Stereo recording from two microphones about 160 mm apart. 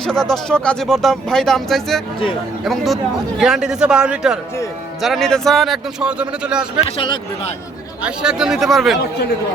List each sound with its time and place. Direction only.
0.0 s speech: 5° left (ahead or behind)
6.8 s speech: 35° left (ahead or behind)
8.0 s speech: 5° right (ahead or behind)